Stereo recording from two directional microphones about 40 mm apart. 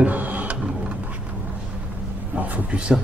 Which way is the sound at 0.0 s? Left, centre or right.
Right.